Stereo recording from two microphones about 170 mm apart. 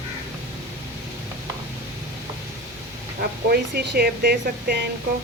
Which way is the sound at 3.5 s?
65° right (ahead or behind).